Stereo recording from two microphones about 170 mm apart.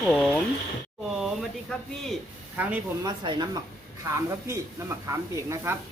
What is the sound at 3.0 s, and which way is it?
Speech, 25° right (ahead or behind).